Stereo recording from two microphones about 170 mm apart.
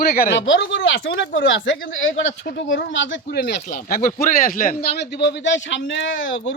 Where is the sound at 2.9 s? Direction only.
90° left; by 4.9 s 55° left (ahead or behind).